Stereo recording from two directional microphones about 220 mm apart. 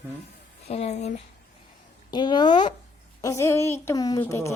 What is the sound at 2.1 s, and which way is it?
A woman's voice, 20° left (ahead or behind).